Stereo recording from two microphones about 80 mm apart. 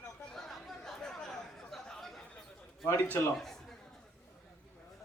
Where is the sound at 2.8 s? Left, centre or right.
Left.